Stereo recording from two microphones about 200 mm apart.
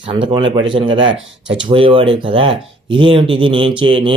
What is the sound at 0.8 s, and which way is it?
Speech, 75° right (ahead or behind).